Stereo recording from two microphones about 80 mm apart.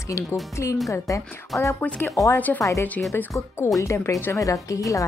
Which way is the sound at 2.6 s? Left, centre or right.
Left.